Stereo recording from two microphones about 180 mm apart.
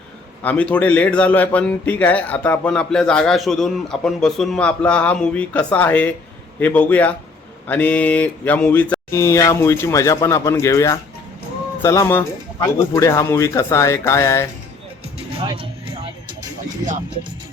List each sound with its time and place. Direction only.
0.4 s a man's voice: 10° left (ahead or behind)
15.3 s speech: 30° right (ahead or behind)